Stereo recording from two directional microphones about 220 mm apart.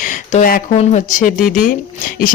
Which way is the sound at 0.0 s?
35° left (ahead or behind).